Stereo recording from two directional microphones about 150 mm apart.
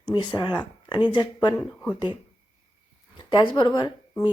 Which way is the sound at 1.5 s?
10° left (ahead or behind).